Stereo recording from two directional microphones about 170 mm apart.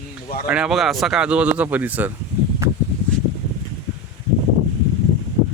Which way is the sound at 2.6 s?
15° right (ahead or behind).